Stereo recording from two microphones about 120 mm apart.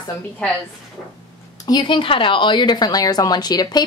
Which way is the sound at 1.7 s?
40° left (ahead or behind).